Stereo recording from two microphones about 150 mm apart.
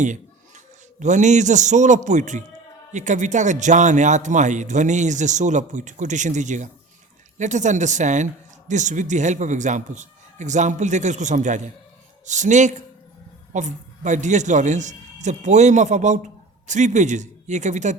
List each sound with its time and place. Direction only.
0.0 s a man's voice: 55° right (ahead or behind)